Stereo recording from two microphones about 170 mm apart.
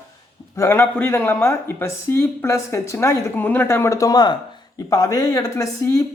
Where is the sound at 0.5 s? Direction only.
15° left (ahead or behind).